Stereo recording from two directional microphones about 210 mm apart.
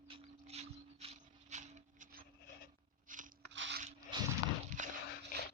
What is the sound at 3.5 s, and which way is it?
Biting, 60° right (ahead or behind).